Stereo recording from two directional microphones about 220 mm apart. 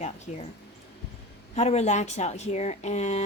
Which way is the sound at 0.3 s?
30° left (ahead or behind).